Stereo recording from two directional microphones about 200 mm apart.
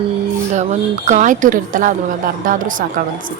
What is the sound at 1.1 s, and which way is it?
A woman's voice, 40° right (ahead or behind).